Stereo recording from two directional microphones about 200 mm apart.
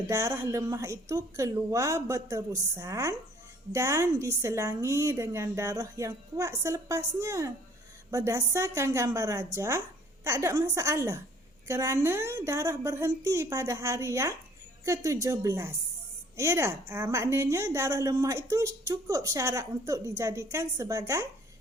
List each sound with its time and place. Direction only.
0.1 s a woman's voice: 15° right (ahead or behind)